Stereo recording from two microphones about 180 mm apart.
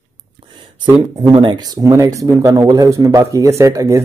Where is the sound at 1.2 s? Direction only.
30° right (ahead or behind).